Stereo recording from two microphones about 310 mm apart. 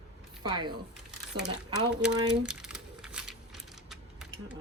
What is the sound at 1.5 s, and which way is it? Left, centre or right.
Speech, centre.